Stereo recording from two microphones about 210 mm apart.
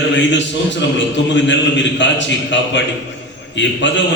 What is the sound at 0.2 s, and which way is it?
A man's voice, 60° left (ahead or behind).